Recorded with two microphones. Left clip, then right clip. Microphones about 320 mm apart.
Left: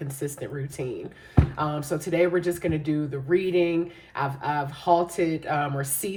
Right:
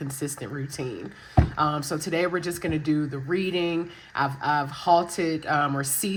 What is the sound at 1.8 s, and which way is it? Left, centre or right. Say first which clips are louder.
Speech: left 2 dB; centre.